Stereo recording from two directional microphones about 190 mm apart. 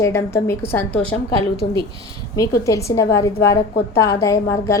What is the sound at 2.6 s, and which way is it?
A woman's voice, 15° left (ahead or behind).